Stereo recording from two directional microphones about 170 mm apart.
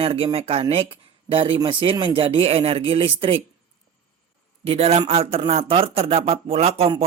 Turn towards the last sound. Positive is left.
turn(degrees=-35)  # may be behind; listen again after turning